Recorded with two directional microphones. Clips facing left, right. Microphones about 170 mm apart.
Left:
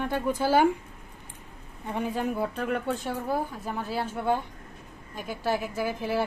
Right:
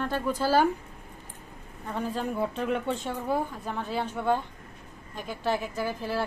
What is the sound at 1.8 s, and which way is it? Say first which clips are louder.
A woman's voice: left 2 dB; 15° left (ahead or behind).